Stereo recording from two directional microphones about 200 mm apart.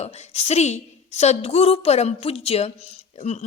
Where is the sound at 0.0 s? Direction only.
35° left (ahead or behind).